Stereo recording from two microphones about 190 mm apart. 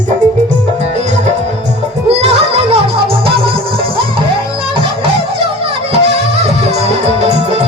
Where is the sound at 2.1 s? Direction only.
30° right (ahead or behind).